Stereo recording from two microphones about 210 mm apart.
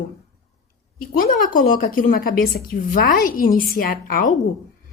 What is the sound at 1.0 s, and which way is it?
A woman's voice, 40° left (ahead or behind).